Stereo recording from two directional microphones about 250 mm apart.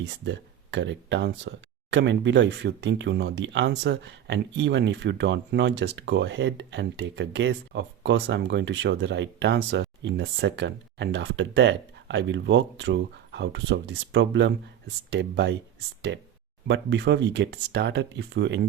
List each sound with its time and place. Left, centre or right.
0.0 s speech: right